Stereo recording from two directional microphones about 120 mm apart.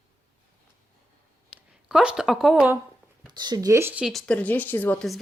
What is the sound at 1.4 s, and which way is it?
Speech, 5° right (ahead or behind).